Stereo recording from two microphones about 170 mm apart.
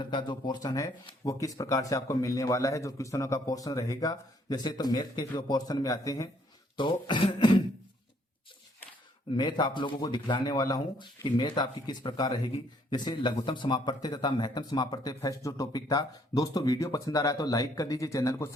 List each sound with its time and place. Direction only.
0.0 s speech: 25° left (ahead or behind)
9.3 s speech: 25° left (ahead or behind)